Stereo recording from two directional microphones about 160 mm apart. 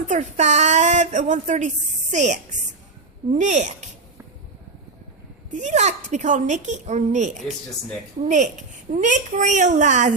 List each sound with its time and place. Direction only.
0.1 s a woman's voice: 45° right (ahead or behind)
5.5 s a woman's voice: 50° right (ahead or behind)